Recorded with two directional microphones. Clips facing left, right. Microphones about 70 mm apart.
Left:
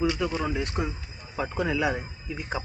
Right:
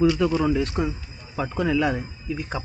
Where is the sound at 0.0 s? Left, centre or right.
Centre.